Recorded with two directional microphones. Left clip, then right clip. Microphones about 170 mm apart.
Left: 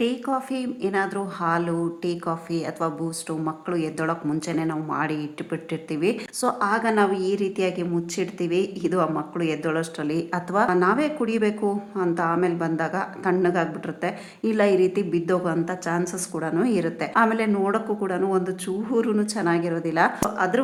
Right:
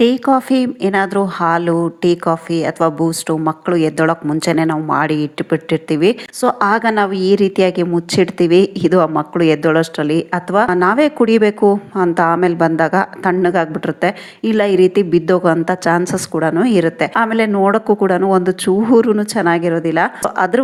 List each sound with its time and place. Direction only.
0.0 s speech: 40° right (ahead or behind)
20.3 s speech: 45° right (ahead or behind)